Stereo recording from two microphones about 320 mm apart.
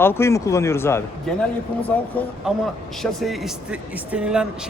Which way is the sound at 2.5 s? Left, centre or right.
Centre.